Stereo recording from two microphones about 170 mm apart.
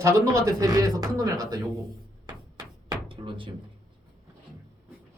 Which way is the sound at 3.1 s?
30° right (ahead or behind).